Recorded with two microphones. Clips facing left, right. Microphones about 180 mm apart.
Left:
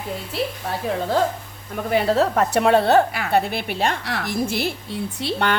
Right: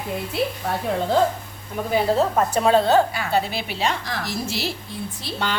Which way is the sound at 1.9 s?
75° left (ahead or behind).